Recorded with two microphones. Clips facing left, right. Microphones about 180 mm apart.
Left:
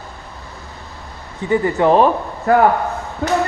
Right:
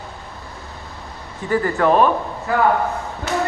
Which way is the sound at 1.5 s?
20° left (ahead or behind).